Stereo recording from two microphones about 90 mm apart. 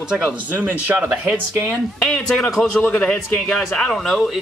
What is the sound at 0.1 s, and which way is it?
Speech, 20° right (ahead or behind).